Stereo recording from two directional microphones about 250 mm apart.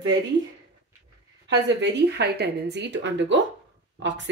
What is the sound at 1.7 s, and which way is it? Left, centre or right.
Speech, right.